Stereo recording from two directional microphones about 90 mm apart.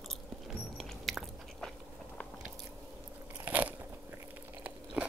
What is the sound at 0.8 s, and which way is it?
Biting, centre (ahead or behind).